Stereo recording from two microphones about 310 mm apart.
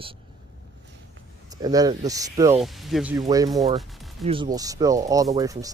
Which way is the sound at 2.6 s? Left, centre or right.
Centre.